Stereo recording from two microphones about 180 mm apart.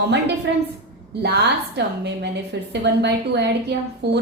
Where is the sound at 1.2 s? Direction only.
65° right (ahead or behind).